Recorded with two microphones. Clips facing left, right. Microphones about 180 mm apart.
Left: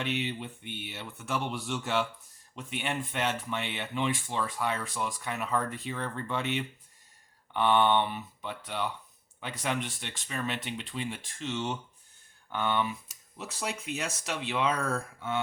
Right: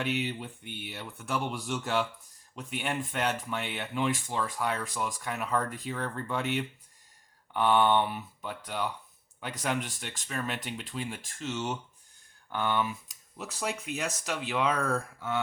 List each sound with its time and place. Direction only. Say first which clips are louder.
0.0 s speech: right 1 dB; centre (ahead or behind)
0.6 s speech: left 1 dB; 45° right (ahead or behind)
0.9 s speech: right 1 dB; centre (ahead or behind)